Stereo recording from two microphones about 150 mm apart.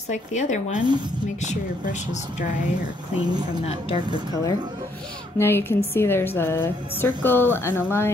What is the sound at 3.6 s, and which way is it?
Speech, 40° left (ahead or behind).